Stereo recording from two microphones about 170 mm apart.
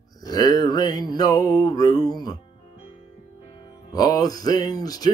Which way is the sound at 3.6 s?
20° left (ahead or behind).